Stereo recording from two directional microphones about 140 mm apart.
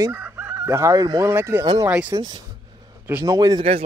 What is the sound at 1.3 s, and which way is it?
Coin, 15° right (ahead or behind).